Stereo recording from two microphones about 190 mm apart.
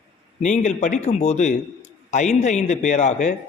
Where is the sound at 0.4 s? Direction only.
40° left (ahead or behind).